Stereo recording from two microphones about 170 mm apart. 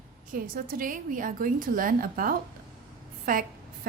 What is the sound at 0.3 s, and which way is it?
A woman's voice, 60° right (ahead or behind).